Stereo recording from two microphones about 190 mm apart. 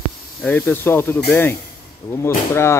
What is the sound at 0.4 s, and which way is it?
Speech, 10° left (ahead or behind).